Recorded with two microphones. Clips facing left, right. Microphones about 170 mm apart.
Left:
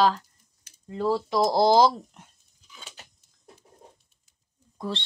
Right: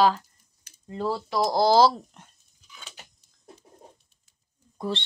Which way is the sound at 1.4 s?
25° left (ahead or behind).